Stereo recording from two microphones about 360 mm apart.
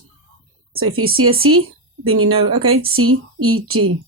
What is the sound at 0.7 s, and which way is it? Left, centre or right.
A woman's voice, right.